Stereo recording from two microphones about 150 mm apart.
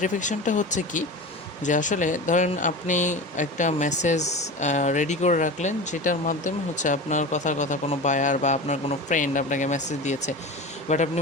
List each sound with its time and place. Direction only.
0.0 s speech: 55° left (ahead or behind)